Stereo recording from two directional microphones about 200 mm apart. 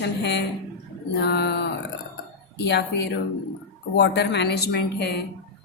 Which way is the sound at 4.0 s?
55° left (ahead or behind).